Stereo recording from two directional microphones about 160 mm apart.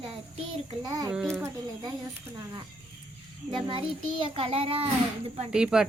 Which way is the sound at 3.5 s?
30° right (ahead or behind).